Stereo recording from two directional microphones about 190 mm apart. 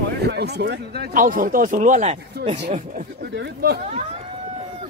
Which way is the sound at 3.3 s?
60° right (ahead or behind).